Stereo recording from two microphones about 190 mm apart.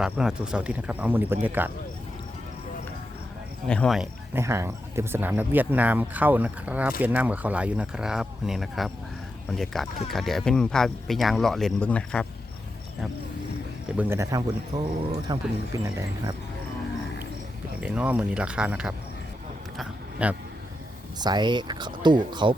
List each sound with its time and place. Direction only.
0.0 s speech: 5° right (ahead or behind)
3.7 s speech: 5° left (ahead or behind)
4.4 s speech: 15° right (ahead or behind); by 12.3 s 5° left (ahead or behind)
13.8 s speech: 5° right (ahead or behind)
17.7 s speech: 5° right (ahead or behind)
19.7 s a sound: 5° right (ahead or behind)
21.2 s speech: 20° right (ahead or behind)